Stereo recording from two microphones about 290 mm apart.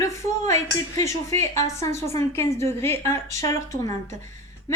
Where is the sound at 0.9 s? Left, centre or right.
Centre.